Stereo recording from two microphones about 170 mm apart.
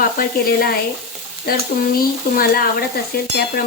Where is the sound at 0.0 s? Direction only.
60° left (ahead or behind).